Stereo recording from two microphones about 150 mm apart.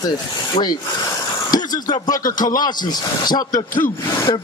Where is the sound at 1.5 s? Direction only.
25° left (ahead or behind).